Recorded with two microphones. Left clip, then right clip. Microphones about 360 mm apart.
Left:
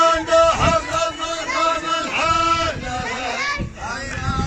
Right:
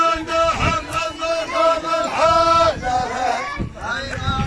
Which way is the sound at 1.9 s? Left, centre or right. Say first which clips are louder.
Right 3 dB; centre.